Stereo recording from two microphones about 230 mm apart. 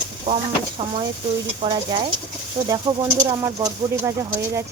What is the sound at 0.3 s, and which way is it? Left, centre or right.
Speech, right.